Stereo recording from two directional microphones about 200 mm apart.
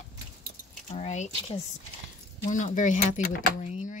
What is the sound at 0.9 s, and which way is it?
Speech, 35° left (ahead or behind).